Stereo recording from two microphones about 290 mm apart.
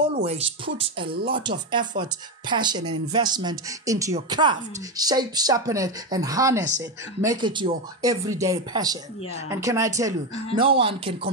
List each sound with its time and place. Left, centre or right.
0.1 s music: right
0.7 s speech: centre